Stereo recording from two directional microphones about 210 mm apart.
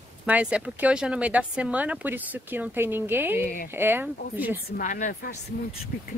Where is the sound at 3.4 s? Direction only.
40° left (ahead or behind).